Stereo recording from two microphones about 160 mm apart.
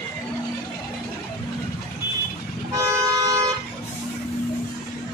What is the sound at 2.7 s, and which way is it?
Toot, 20° right (ahead or behind).